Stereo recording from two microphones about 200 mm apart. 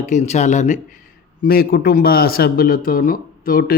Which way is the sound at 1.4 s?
50° left (ahead or behind).